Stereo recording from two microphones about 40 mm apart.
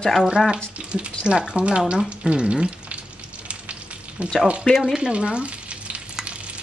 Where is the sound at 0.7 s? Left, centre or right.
Right.